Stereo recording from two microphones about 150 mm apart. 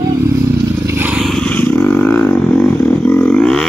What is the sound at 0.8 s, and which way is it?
Vehicle, 10° right (ahead or behind).